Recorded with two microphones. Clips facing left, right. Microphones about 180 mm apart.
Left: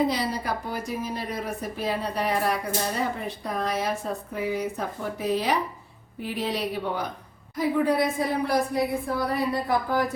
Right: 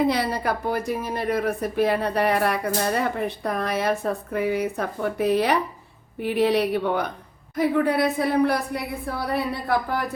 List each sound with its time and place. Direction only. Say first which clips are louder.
0.1 s speech: right 4 dB; 60° right (ahead or behind)